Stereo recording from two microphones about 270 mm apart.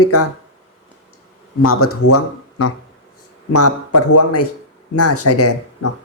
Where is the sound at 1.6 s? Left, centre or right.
Left.